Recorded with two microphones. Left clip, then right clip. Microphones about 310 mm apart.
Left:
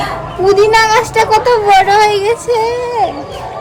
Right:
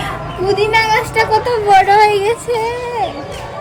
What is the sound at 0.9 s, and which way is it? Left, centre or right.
Speech, centre.